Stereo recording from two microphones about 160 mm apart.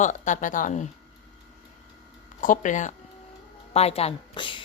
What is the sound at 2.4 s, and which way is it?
Speech, 55° left (ahead or behind).